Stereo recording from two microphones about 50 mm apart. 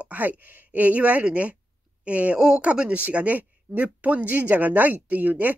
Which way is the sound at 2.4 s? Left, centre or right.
Centre.